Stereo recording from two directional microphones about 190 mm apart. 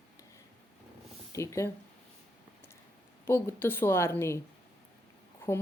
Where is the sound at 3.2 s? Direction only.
15° left (ahead or behind).